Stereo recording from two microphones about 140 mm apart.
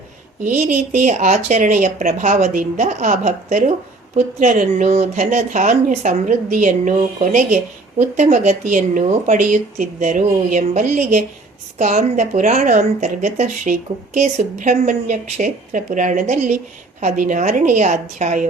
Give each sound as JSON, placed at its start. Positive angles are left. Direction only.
{"t": 0.5, "sound": "speech", "side_deg": -65}